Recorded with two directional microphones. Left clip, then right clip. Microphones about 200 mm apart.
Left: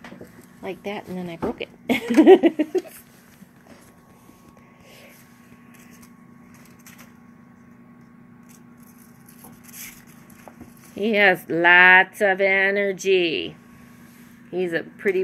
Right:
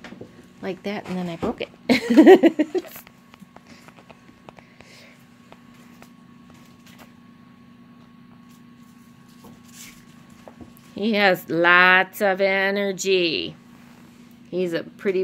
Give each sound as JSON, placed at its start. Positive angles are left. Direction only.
{"t": 0.6, "sound": "a woman's voice", "side_deg": -45}
{"t": 11.0, "sound": "speech", "side_deg": -90}
{"t": 11.3, "sound": "speech", "side_deg": -15}
{"t": 11.7, "sound": "speech", "side_deg": -90}
{"t": 14.5, "sound": "speech", "side_deg": -20}